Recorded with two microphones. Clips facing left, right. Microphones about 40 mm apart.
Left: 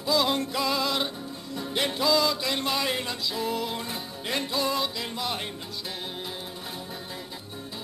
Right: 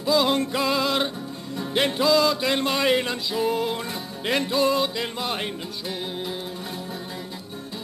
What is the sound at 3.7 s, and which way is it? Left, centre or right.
Music, centre.